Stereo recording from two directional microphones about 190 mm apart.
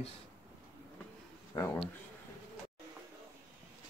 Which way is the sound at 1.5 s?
15° left (ahead or behind).